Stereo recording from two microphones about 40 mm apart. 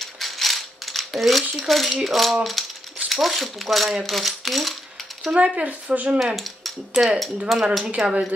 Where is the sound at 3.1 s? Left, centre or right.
Centre.